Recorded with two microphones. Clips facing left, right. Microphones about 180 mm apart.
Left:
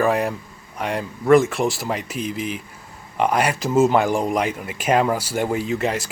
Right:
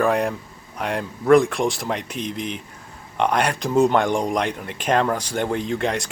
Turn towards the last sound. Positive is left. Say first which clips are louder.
# left 1 dB
turn(degrees=5)  # may be behind; listen again after turning